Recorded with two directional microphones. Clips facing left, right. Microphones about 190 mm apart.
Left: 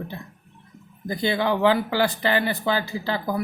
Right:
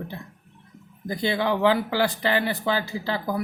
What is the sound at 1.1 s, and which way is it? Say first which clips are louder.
Speech: left 1 dB; 50° left (ahead or behind).